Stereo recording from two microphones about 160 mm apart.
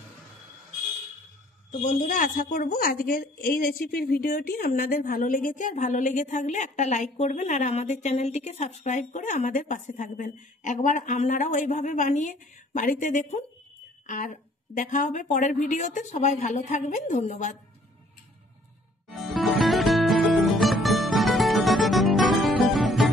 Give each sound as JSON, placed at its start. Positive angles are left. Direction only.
{"t": 1.7, "sound": "a woman's voice", "side_deg": 50}
{"t": 19.1, "sound": "music", "side_deg": 0}